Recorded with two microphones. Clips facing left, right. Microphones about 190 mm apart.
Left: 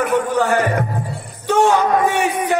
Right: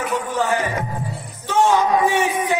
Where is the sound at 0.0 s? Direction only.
60° left (ahead or behind).